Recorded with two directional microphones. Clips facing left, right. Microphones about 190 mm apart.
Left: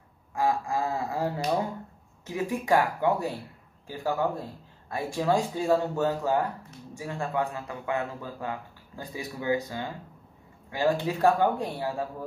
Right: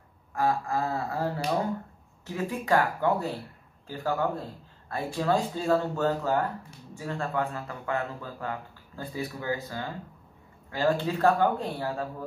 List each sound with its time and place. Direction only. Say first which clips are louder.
0.3 s a man's voice: even; 15° left (ahead or behind)